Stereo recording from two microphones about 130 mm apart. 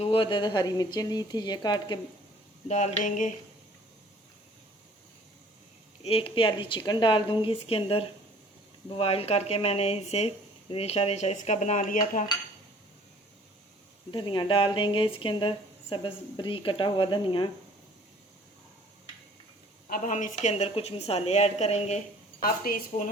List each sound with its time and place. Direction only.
0.0 s speech: 45° left (ahead or behind)
2.6 s a sound: 60° left (ahead or behind)
6.0 s speech: 50° left (ahead or behind); by 12.2 s 75° left (ahead or behind)
14.1 s speech: 40° left (ahead or behind)
19.9 s a woman's voice: 75° left (ahead or behind); by 23.1 s 55° left (ahead or behind)